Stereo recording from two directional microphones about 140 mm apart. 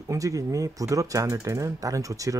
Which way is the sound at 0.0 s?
25° right (ahead or behind).